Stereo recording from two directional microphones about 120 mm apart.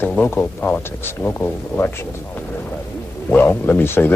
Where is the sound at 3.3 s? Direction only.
15° left (ahead or behind).